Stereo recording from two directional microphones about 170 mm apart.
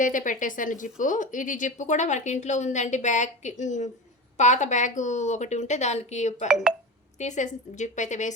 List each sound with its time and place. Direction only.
0.0 s speech: 50° left (ahead or behind)
6.5 s speech: 5° right (ahead or behind)
7.2 s speech: 45° left (ahead or behind)